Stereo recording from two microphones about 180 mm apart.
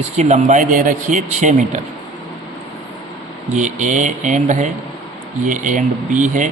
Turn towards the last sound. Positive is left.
turn(degrees=-45)  # may be behind; listen again after turning